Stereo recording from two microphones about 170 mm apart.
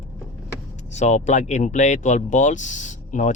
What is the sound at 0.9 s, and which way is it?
Speech, 45° left (ahead or behind).